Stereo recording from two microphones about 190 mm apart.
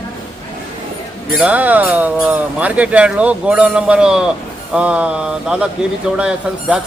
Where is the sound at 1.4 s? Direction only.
5° right (ahead or behind).